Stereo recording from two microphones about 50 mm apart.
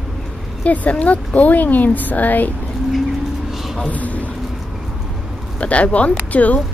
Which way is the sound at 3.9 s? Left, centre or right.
Left.